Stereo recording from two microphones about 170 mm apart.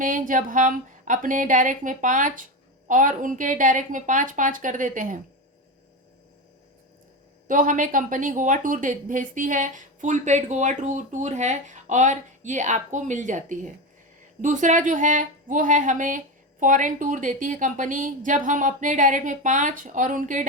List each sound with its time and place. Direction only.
0.0 s speech: 50° right (ahead or behind)
7.4 s speech: 50° right (ahead or behind)